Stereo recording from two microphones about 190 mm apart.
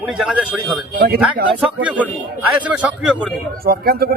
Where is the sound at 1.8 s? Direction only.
10° right (ahead or behind).